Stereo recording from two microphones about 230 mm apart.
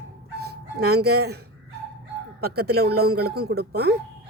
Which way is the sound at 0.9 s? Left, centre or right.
Right.